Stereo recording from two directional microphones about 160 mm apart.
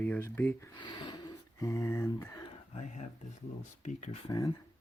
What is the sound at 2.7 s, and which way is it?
Speech, 45° left (ahead or behind).